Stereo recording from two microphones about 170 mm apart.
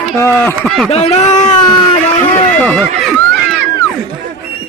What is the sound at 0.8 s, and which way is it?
Speech, 35° left (ahead or behind).